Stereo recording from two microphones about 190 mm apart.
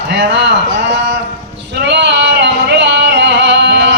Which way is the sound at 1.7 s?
65° right (ahead or behind).